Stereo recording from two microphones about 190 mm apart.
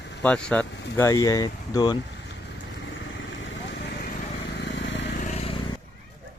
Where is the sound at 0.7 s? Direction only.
65° left (ahead or behind).